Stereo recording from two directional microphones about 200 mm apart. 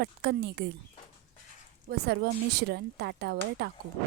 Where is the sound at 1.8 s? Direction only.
55° right (ahead or behind).